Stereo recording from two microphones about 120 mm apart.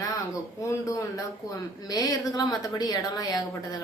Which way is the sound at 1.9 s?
30° left (ahead or behind).